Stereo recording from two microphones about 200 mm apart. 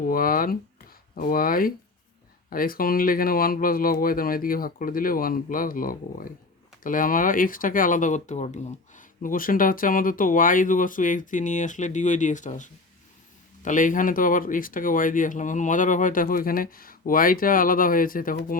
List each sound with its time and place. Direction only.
0.1 s speech: 45° left (ahead or behind)